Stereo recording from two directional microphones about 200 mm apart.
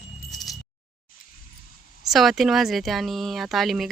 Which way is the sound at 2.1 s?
Centre (ahead or behind).